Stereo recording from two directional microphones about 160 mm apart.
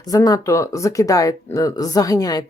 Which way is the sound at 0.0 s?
25° left (ahead or behind).